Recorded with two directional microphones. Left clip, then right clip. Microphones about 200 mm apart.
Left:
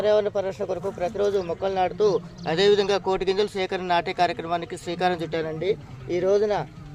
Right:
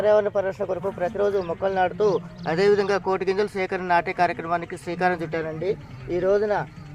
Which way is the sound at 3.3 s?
5° left (ahead or behind).